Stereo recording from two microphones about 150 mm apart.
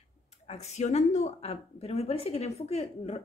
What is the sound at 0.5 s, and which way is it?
Speech, 50° left (ahead or behind).